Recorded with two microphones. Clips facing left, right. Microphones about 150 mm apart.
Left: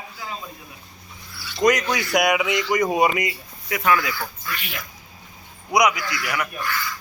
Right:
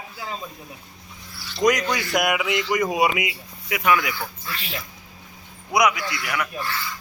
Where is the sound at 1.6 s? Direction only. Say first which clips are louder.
Left 1 dB; centre (ahead or behind); by 4.2 s 20° right (ahead or behind).